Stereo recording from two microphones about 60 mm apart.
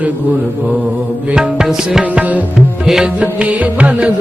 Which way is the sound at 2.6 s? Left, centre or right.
Centre.